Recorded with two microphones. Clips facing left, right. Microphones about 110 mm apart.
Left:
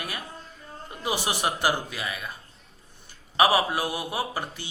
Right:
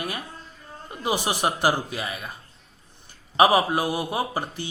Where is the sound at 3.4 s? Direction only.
30° right (ahead or behind).